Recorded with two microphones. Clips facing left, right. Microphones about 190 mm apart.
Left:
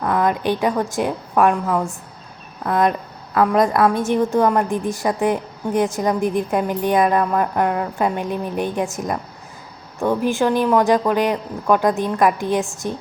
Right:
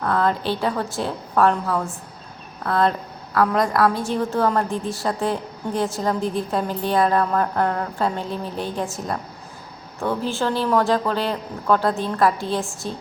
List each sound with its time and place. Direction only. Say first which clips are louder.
0.0 s a woman's voice: left 2 dB; 15° left (ahead or behind)